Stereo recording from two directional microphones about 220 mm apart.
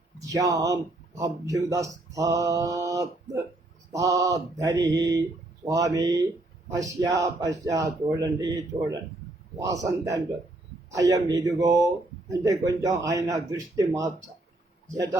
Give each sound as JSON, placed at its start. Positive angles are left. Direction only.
{"t": 0.2, "sound": "speech", "side_deg": -15}